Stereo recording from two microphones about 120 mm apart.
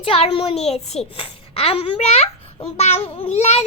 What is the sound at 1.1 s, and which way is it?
Speech, 50° left (ahead or behind).